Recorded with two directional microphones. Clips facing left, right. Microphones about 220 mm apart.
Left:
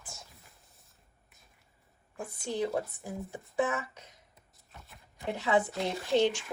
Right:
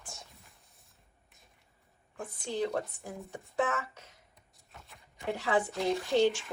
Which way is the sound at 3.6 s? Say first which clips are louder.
Left 1 dB; 15° left (ahead or behind).